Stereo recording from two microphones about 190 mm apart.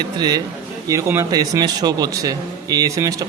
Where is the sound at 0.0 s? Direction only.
20° right (ahead or behind).